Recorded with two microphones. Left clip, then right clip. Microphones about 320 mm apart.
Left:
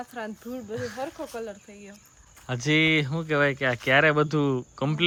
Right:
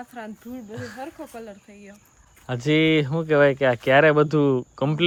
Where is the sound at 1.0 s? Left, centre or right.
Centre.